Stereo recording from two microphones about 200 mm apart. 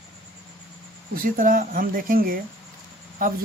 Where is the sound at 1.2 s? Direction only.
45° right (ahead or behind).